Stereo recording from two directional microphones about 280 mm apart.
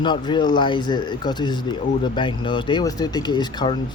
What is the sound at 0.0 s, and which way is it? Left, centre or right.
Speech, centre.